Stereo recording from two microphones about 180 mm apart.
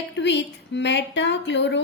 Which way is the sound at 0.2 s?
75° left (ahead or behind).